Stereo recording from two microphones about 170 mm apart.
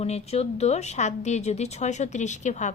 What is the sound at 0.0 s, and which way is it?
Speech, 40° left (ahead or behind).